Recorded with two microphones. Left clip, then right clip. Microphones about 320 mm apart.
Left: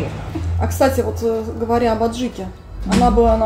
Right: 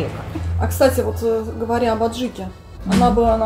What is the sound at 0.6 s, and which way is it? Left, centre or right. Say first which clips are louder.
Music: even; centre.